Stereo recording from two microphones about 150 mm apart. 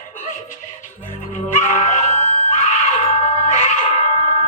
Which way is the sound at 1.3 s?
55° left (ahead or behind).